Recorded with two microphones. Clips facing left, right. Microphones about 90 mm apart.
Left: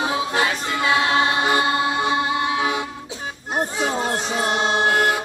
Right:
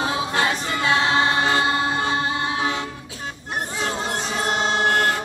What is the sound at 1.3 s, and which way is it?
Music, 15° left (ahead or behind).